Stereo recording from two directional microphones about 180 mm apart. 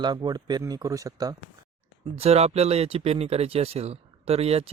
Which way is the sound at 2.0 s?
35° right (ahead or behind).